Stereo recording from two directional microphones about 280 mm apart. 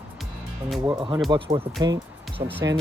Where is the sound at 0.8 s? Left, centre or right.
Centre.